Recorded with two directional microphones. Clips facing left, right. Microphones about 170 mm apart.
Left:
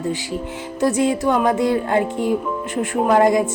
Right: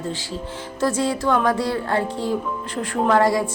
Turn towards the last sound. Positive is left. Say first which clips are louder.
# left 3 dB
turn(degrees=20)  # may be behind; listen again after turning